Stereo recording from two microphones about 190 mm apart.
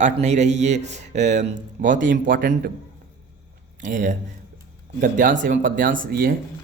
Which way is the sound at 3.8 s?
40° right (ahead or behind).